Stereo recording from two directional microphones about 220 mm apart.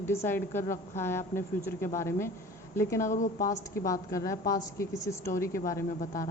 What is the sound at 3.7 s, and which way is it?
A woman's voice, 15° left (ahead or behind).